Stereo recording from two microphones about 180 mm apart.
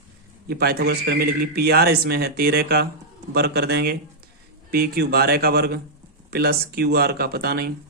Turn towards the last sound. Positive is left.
turn(degrees=-60)  # may be behind; listen again after turning